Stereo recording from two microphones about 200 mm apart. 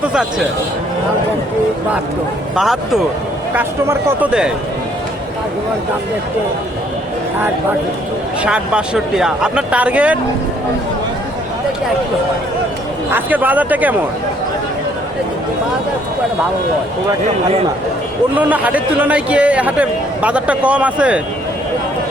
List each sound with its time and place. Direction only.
0.1 s speech: 5° right (ahead or behind)
2.6 s speech: centre (ahead or behind)
8.4 s speech: 5° right (ahead or behind)
13.1 s speech: 10° right (ahead or behind)
18.3 s speech: 10° right (ahead or behind)